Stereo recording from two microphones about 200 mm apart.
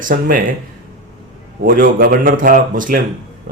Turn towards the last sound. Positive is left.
turn(degrees=-45)  # may be behind; listen again after turning